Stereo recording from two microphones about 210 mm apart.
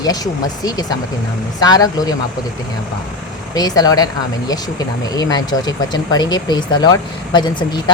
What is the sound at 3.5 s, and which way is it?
Speech, 20° left (ahead or behind).